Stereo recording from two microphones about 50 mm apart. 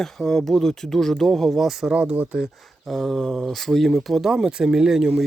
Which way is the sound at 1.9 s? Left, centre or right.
Right.